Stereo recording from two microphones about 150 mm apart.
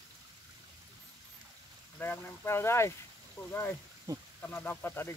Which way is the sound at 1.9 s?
10° left (ahead or behind).